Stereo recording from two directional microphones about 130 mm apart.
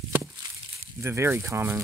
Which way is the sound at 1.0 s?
20° right (ahead or behind).